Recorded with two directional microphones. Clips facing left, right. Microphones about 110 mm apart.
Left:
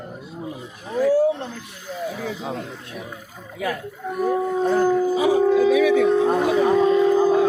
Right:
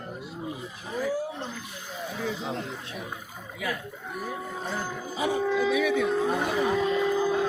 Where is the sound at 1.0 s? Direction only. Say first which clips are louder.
Left 12 dB; 75° left (ahead or behind).